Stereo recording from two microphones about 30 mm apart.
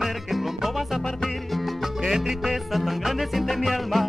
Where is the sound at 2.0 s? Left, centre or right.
Centre.